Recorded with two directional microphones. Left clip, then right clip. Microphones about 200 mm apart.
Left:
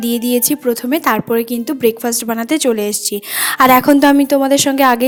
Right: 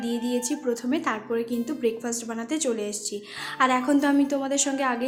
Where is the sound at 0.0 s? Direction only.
50° left (ahead or behind).